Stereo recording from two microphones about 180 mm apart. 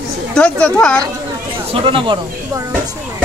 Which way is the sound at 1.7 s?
30° right (ahead or behind).